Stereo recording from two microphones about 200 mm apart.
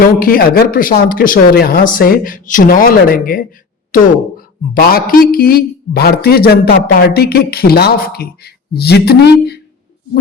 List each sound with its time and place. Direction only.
0.2 s a man's voice: 45° left (ahead or behind)